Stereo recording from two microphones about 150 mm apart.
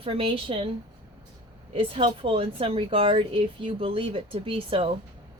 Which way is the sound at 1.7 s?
35° right (ahead or behind).